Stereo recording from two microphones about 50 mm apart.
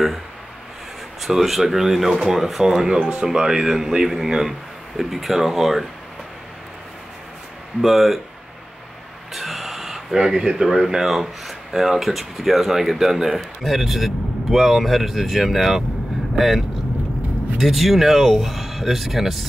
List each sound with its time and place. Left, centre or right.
1.2 s speech: centre
7.8 s speech: centre
9.3 s a sound: centre
10.1 s speech: centre